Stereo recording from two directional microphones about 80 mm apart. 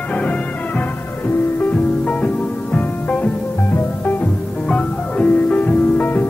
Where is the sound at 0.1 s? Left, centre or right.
Centre.